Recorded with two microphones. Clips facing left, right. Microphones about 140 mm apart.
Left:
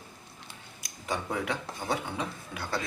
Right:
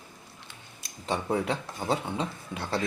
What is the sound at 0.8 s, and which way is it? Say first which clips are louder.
Speech: right 3 dB; 30° right (ahead or behind).